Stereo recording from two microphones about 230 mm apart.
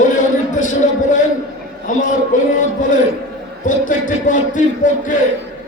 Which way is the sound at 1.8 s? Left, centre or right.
Left.